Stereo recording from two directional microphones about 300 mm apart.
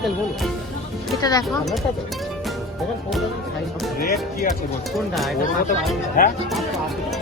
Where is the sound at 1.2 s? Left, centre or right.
Centre.